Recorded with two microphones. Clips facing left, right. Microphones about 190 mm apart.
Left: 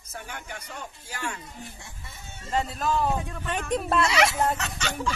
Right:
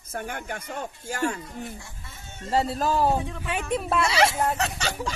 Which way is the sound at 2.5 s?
35° right (ahead or behind).